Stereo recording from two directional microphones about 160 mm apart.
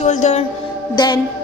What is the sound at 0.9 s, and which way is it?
Music, 25° left (ahead or behind).